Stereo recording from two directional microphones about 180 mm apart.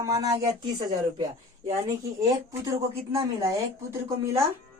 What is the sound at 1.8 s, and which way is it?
Speech, 20° right (ahead or behind).